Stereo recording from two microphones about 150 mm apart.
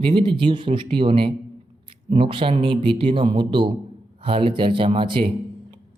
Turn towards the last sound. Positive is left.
turn(degrees=-35)  # may be behind; listen again after turning